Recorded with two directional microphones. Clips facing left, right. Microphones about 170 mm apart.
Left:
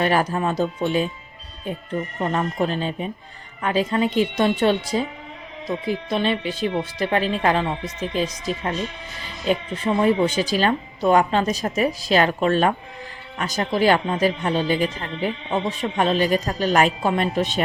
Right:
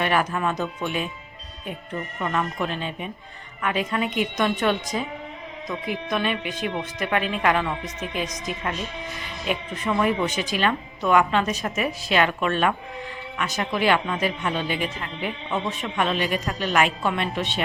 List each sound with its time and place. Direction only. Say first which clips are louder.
0.0 s speech: left 3 dB; 35° left (ahead or behind)